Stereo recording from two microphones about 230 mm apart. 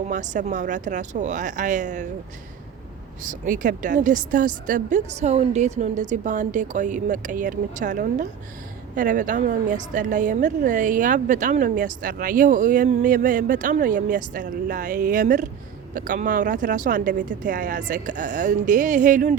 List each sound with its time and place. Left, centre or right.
0.1 s a woman's voice: right
3.4 s a woman's voice: right